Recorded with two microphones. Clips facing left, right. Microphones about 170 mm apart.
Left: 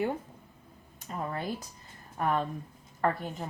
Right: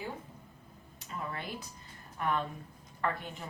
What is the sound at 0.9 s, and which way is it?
A woman's voice, 45° left (ahead or behind).